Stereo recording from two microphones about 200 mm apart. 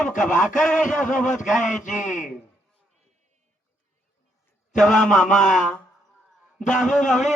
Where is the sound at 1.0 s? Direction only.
40° left (ahead or behind).